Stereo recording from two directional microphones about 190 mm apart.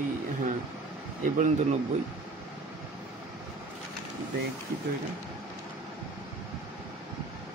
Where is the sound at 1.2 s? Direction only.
40° right (ahead or behind).